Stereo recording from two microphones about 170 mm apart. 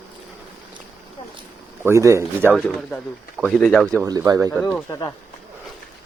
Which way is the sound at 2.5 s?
5° left (ahead or behind).